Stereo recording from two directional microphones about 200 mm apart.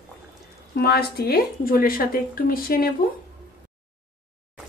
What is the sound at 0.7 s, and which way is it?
Speech, 55° left (ahead or behind).